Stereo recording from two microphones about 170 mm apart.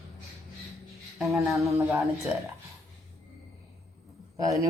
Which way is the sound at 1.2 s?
Centre (ahead or behind).